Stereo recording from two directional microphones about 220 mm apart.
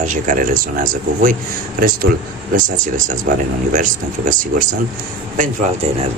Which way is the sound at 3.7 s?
35° right (ahead or behind).